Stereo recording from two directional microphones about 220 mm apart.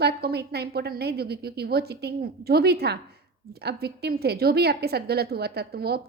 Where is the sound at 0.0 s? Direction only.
45° right (ahead or behind).